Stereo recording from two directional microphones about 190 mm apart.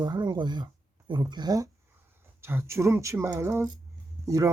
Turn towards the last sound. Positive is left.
turn(degrees=-15)  # may be behind; listen again after turning